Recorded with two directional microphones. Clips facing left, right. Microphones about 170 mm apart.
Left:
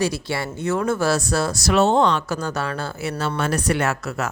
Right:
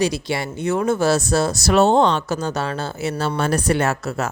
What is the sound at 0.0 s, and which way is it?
Speech, 20° right (ahead or behind).